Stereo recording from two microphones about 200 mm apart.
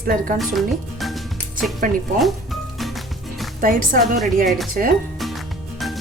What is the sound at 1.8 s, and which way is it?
Speech, 45° right (ahead or behind).